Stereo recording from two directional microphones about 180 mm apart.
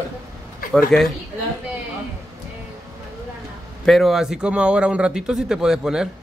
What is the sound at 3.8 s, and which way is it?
A woman's voice, centre (ahead or behind).